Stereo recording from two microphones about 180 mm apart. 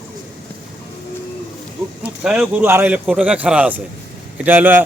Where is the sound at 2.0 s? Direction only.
5° right (ahead or behind).